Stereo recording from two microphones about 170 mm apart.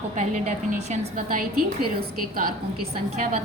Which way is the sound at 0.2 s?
40° right (ahead or behind).